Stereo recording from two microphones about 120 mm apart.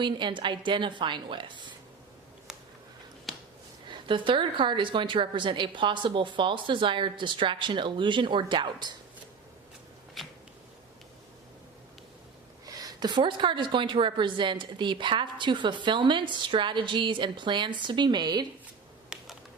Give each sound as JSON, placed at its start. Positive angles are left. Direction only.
{"t": 0.0, "sound": "a woman's voice", "side_deg": -40}
{"t": 3.3, "sound": "finger snapping", "side_deg": 0}
{"t": 3.8, "sound": "a woman's voice", "side_deg": -45}
{"t": 12.6, "sound": "a woman's voice", "side_deg": -35}
{"t": 19.1, "sound": "a sound", "side_deg": -5}